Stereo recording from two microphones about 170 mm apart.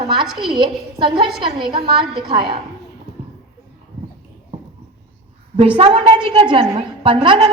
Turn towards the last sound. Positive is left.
turn(degrees=-30)  # may be behind; listen again after turning